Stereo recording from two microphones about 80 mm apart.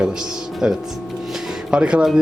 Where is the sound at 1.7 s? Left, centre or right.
Centre.